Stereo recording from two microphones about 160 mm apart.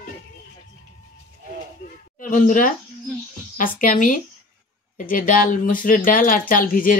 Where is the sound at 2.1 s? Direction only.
55° left (ahead or behind).